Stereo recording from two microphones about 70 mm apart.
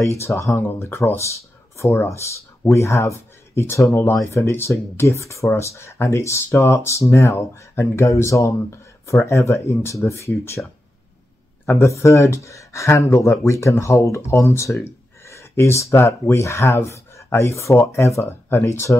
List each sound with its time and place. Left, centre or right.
0.0 s speech: left
0.7 s speech: left
11.6 s speech: left